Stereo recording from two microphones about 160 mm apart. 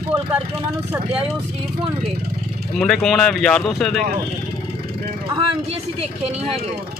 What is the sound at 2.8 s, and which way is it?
Speech, 5° left (ahead or behind).